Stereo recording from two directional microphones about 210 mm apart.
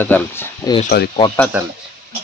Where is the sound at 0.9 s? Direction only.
50° left (ahead or behind).